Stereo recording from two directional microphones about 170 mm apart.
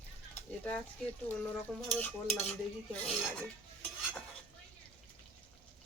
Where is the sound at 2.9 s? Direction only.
5° left (ahead or behind).